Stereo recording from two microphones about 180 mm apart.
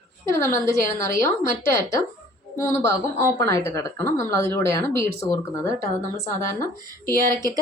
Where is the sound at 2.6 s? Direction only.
15° left (ahead or behind).